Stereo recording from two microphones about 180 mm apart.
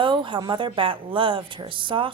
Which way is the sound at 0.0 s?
25° right (ahead or behind).